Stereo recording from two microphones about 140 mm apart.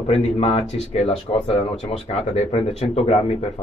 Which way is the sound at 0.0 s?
45° left (ahead or behind).